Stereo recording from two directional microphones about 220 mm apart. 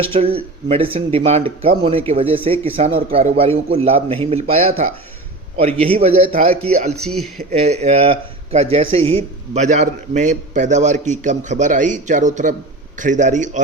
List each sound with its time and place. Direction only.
0.0 s speech: 25° right (ahead or behind)
7.6 s speech: 30° right (ahead or behind)